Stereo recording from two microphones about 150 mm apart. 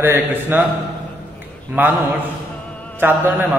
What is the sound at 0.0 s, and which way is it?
Speech, 15° right (ahead or behind).